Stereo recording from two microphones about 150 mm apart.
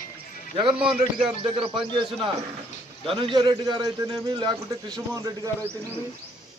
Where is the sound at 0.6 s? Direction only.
35° right (ahead or behind).